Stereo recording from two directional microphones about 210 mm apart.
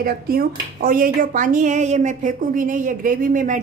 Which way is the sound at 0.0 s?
45° right (ahead or behind).